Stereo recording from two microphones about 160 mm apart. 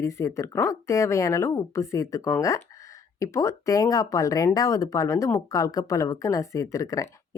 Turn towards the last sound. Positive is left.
turn(degrees=20)  # may be behind; listen again after turning